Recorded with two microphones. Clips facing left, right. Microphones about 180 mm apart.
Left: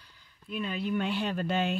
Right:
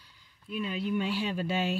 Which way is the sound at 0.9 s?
55° left (ahead or behind).